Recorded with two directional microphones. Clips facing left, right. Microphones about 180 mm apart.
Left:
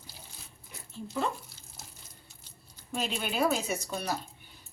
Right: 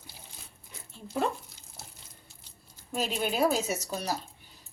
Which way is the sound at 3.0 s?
40° right (ahead or behind).